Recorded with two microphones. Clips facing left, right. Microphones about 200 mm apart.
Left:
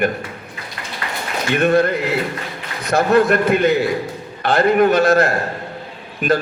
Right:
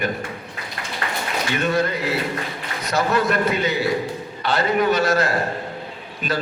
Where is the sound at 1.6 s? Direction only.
55° left (ahead or behind).